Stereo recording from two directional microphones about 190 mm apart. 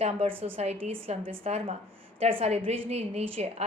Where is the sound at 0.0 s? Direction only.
30° right (ahead or behind).